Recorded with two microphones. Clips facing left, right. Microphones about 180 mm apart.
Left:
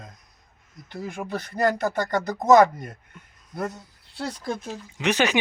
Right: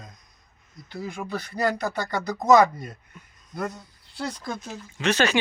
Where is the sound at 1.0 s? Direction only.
50° left (ahead or behind).